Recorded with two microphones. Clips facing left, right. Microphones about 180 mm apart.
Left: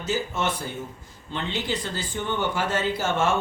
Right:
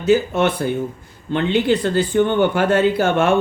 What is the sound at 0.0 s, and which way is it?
Speech, 60° right (ahead or behind).